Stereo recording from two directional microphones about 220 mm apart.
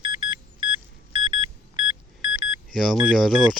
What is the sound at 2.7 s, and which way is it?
Speech, centre (ahead or behind).